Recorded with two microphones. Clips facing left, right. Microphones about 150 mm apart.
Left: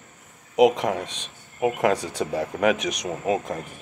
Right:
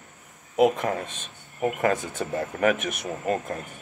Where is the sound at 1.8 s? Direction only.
90° left.